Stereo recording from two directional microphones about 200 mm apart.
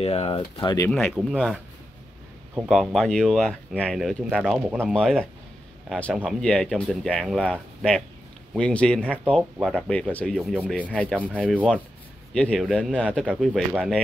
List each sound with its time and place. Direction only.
0.0 s speech: 30° left (ahead or behind)
1.1 s speech: centre (ahead or behind)
8.5 s speech: 5° left (ahead or behind)
10.9 s speech: 5° left (ahead or behind)